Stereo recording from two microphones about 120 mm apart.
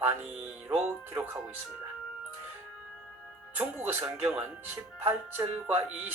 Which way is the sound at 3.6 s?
15° right (ahead or behind).